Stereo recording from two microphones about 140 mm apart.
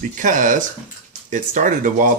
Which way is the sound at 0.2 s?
70° right (ahead or behind).